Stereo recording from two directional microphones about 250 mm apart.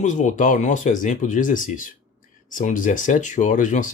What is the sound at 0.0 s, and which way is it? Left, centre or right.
Speech, left.